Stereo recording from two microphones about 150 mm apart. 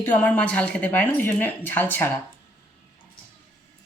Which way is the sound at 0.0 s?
10° left (ahead or behind).